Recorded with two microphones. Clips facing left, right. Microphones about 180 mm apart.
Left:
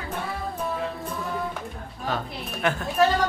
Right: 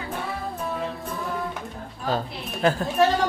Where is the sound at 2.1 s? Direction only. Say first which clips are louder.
Right 3 dB; 35° right (ahead or behind).